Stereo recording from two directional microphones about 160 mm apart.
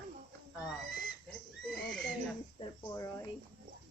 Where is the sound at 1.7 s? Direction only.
5° left (ahead or behind).